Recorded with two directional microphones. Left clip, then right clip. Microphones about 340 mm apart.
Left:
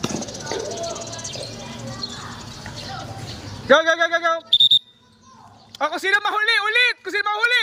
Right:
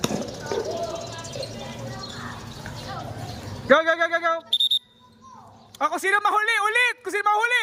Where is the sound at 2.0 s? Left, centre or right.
Right.